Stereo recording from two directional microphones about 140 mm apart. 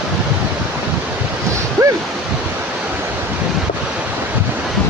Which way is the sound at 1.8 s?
25° right (ahead or behind).